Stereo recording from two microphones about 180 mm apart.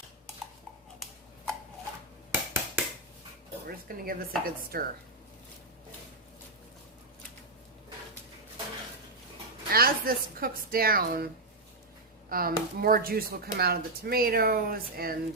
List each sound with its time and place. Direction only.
2.3 s a sound: 10° right (ahead or behind)
3.7 s speech: 55° right (ahead or behind)
9.7 s speech: 55° right (ahead or behind)
12.3 s speech: 55° right (ahead or behind)